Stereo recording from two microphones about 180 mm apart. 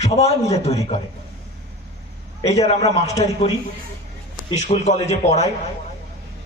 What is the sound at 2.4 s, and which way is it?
Speech, 35° left (ahead or behind).